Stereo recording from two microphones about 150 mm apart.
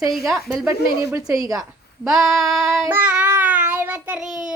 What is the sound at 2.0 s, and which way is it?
Speech, centre (ahead or behind).